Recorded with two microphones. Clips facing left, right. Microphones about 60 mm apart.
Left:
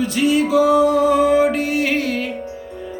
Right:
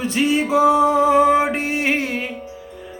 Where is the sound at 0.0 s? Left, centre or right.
Right.